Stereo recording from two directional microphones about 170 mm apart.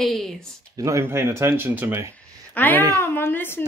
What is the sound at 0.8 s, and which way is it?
Speech, 15° right (ahead or behind).